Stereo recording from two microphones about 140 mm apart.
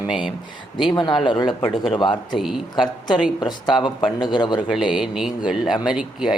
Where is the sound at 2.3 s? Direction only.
5° right (ahead or behind).